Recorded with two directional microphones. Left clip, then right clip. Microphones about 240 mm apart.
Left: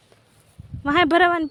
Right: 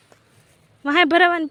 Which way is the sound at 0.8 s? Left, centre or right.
Centre.